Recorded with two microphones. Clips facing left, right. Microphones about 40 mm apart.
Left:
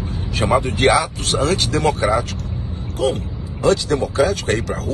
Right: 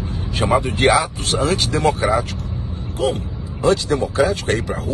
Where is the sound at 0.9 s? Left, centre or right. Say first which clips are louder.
Even; right.